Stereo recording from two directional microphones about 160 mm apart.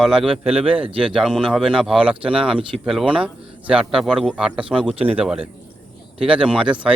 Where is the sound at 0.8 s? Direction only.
35° right (ahead or behind).